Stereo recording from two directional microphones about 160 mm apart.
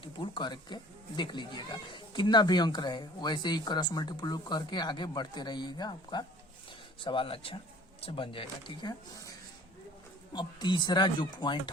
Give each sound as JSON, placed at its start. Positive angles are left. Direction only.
{"t": 0.0, "sound": "speech", "side_deg": 30}
{"t": 10.3, "sound": "speech", "side_deg": 30}